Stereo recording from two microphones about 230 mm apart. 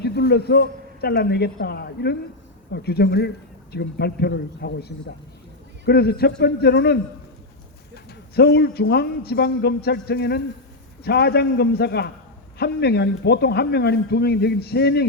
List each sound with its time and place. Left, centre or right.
0.0 s speech: left
8.4 s speech: left